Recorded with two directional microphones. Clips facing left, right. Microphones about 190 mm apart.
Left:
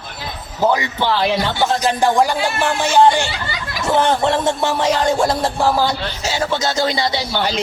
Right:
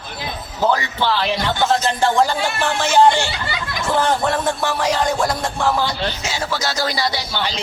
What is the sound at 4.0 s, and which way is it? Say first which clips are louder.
Music: left 3 dB; 25° left (ahead or behind).